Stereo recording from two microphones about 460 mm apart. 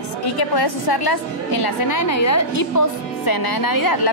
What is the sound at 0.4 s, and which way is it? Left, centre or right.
A woman's voice, left.